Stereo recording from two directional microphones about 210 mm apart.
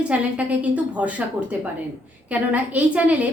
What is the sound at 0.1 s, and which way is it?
A woman's voice, 5° right (ahead or behind).